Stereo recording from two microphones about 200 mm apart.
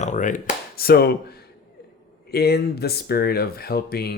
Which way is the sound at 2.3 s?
50° left (ahead or behind).